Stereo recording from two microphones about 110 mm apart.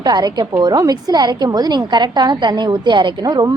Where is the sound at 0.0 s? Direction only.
40° right (ahead or behind).